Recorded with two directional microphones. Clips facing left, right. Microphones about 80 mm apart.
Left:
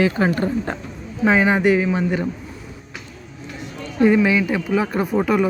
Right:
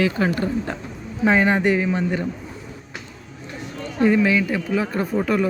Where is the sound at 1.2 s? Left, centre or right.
Centre.